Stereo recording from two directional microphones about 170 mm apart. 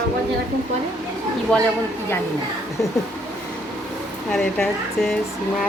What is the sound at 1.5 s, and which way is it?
Speech, 5° left (ahead or behind).